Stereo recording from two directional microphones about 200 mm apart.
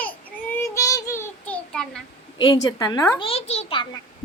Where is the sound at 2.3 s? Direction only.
20° left (ahead or behind).